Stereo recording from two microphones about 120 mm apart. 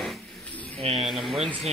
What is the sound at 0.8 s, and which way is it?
Speech, 55° right (ahead or behind).